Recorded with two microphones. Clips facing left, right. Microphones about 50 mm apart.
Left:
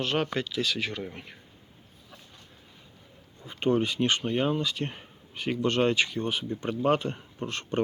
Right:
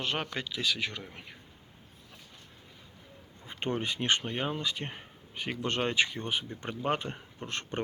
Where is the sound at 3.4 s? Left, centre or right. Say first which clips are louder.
Left 7 dB; right.